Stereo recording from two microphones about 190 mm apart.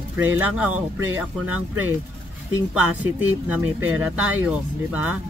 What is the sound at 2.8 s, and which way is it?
Speech, 10° right (ahead or behind).